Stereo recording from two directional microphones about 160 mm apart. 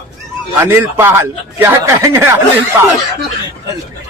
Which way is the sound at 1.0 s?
15° right (ahead or behind).